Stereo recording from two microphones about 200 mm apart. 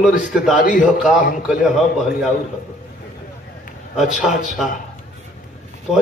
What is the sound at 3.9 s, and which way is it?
Speech, centre (ahead or behind).